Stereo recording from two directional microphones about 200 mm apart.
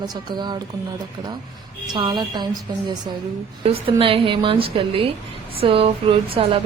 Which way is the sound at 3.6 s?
25° right (ahead or behind).